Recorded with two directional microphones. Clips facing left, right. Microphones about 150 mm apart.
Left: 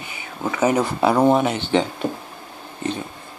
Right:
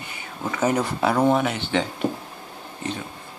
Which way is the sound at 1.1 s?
25° left (ahead or behind).